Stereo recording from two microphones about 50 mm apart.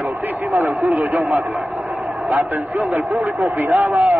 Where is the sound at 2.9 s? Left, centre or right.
Right.